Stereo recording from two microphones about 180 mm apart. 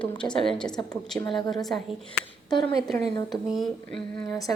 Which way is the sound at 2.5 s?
25° left (ahead or behind).